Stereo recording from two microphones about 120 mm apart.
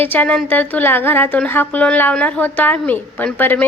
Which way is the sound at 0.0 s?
15° left (ahead or behind).